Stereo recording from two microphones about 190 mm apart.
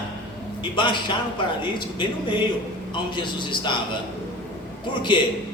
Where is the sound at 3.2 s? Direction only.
25° left (ahead or behind).